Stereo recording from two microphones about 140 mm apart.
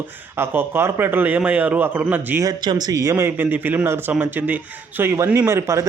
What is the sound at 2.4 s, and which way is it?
A man's voice, 30° right (ahead or behind).